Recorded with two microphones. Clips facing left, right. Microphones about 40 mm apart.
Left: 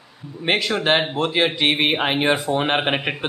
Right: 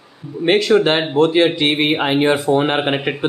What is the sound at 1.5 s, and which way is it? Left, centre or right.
Speech, left.